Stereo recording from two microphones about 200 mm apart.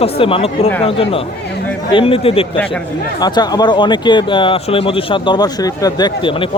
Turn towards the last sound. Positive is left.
turn(degrees=25)  # may be behind; listen again after turning